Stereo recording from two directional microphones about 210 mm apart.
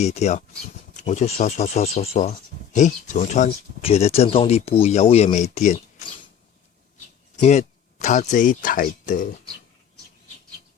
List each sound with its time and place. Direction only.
0.0 s speech: 30° left (ahead or behind)
7.4 s speech: 35° left (ahead or behind)